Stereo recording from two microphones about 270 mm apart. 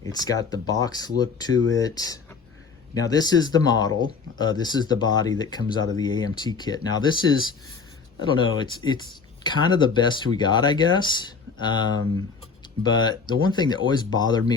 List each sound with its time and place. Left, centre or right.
0.0 s speech: centre